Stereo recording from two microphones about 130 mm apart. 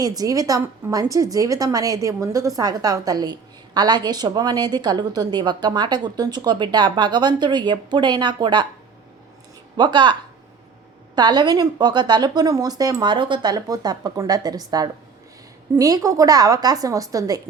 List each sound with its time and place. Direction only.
0.0 s a woman's voice: 30° right (ahead or behind)
9.7 s a woman's voice: 35° right (ahead or behind)